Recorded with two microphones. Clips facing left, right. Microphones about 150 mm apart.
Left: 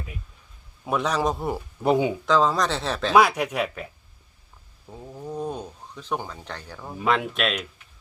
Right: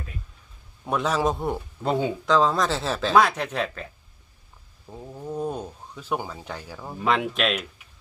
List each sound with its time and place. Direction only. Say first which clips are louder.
0.9 s speech: even; centre (ahead or behind)
1.8 s speech: left 4 dB; 15° left (ahead or behind)
2.2 s speech: even; centre (ahead or behind)
3.2 s speech: left 2 dB; 10° left (ahead or behind)
4.9 s speech: right 1 dB; 5° right (ahead or behind)